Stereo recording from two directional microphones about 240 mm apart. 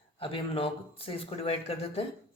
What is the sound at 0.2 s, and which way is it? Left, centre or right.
Speech, left.